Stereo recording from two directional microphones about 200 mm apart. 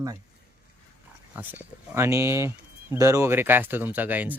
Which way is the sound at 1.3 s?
10° right (ahead or behind).